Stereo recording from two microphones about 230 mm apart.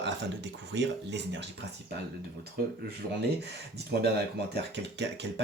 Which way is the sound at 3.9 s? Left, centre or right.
Right.